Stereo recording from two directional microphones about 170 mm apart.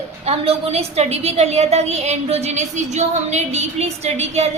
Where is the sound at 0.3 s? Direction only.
35° right (ahead or behind).